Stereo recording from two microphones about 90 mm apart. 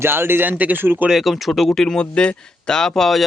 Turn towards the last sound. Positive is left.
turn(degrees=0)  # may be behind; listen again after turning